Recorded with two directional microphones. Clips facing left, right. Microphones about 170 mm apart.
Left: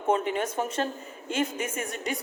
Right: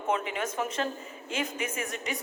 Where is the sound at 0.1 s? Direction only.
35° left (ahead or behind).